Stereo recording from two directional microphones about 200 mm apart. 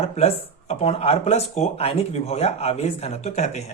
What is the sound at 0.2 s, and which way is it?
Speech, 30° left (ahead or behind).